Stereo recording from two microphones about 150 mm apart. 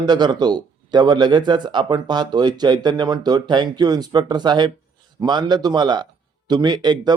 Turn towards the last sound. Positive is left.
turn(degrees=-30)  # may be behind; listen again after turning